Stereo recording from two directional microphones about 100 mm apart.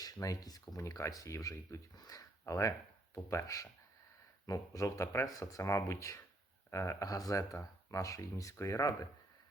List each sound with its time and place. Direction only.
0.0 s speech: 35° left (ahead or behind)